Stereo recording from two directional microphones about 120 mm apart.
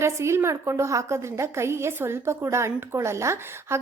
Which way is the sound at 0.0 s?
20° right (ahead or behind).